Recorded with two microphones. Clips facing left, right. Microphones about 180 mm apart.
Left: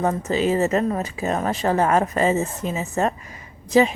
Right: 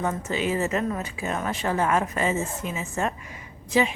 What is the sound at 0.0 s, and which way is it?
A woman's voice, 35° left (ahead or behind).